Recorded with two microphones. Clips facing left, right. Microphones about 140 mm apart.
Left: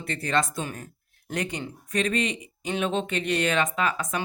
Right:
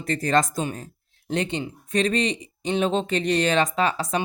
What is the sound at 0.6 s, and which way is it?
Speech, 30° right (ahead or behind).